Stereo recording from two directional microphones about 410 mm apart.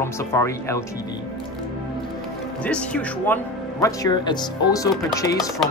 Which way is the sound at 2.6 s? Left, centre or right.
Centre.